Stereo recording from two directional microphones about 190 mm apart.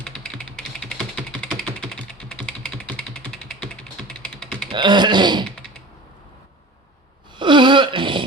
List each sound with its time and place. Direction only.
0.0 s typing: 5° left (ahead or behind)
4.7 s speech: 25° right (ahead or behind)
7.3 s wail: 25° right (ahead or behind)